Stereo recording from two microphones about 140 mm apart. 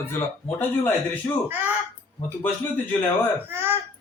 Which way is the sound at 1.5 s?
15° right (ahead or behind).